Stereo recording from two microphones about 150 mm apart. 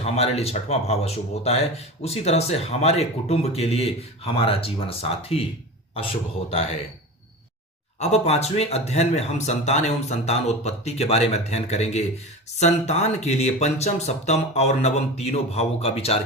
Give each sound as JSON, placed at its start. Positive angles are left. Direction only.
{"t": 0.0, "sound": "speech", "side_deg": 45}
{"t": 7.9, "sound": "speech", "side_deg": 45}